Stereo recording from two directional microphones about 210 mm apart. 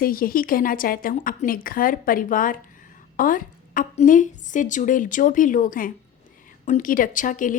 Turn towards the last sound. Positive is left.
turn(degrees=40)  # may be behind; listen again after turning